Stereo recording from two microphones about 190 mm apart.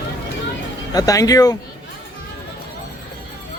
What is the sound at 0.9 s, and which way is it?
Speech, 20° left (ahead or behind).